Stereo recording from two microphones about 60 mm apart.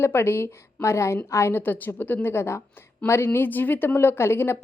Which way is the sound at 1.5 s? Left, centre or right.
Left.